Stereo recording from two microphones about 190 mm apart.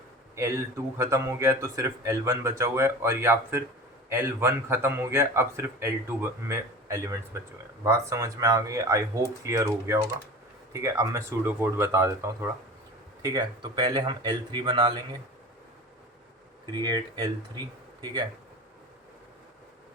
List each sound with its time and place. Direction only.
0.3 s a man's voice: 15° right (ahead or behind)
16.8 s speech: 20° right (ahead or behind)